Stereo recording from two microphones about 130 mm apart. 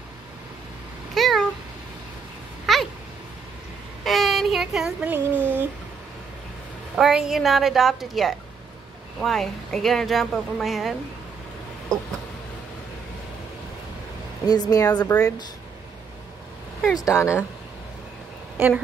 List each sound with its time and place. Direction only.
1.1 s cat: centre (ahead or behind)
2.6 s a sound: centre (ahead or behind)
4.0 s speech: centre (ahead or behind)
5.3 s speech: 10° left (ahead or behind)
7.0 s speech: 5° right (ahead or behind)
14.4 s speech: 30° left (ahead or behind)
16.9 s speech: 25° left (ahead or behind)